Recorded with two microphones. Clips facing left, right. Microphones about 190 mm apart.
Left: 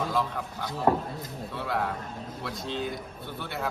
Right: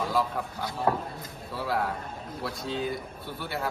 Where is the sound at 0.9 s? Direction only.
25° left (ahead or behind).